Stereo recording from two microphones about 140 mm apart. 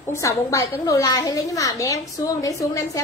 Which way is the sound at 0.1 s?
20° left (ahead or behind).